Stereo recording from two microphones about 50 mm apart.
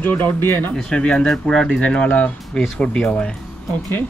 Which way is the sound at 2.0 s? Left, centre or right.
Left.